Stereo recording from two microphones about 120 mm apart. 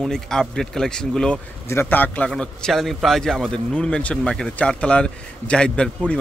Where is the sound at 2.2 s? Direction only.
5° left (ahead or behind).